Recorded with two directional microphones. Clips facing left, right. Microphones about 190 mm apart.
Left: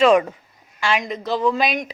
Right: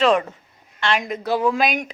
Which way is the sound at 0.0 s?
10° left (ahead or behind).